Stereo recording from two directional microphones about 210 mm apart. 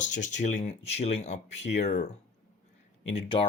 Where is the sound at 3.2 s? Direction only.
25° left (ahead or behind).